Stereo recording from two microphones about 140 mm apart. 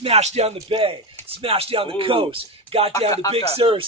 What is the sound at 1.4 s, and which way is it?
Music, 45° right (ahead or behind).